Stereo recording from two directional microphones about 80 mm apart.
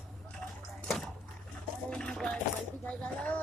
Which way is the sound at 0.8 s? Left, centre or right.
Centre.